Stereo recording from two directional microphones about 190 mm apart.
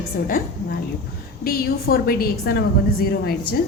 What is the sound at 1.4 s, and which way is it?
A woman's voice, 55° left (ahead or behind).